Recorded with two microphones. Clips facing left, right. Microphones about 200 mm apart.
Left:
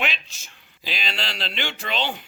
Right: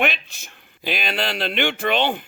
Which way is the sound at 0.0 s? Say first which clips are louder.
Right 6 dB; 55° right (ahead or behind).